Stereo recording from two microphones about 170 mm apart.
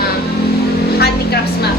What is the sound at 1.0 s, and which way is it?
Vehicle, 70° left (ahead or behind).